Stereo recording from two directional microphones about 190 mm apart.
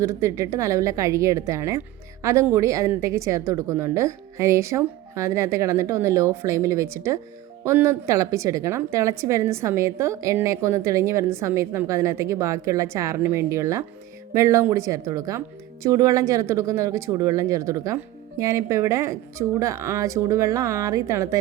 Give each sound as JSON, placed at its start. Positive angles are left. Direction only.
{"t": 0.0, "sound": "speech", "side_deg": -15}